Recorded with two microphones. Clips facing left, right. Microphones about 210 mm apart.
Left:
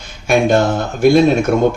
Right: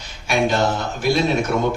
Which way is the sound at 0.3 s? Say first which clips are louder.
Left 6 dB; 50° left (ahead or behind).